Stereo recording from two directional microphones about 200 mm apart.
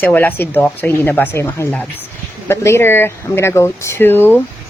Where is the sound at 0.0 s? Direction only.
10° left (ahead or behind).